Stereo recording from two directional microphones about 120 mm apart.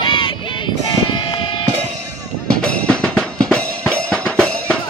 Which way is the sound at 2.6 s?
10° left (ahead or behind).